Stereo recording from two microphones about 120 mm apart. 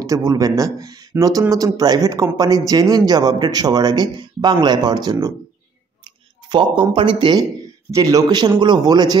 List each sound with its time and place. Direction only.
0.0 s a man's voice: 30° right (ahead or behind)
6.5 s speech: 45° right (ahead or behind)
7.9 s a man's voice: 25° right (ahead or behind)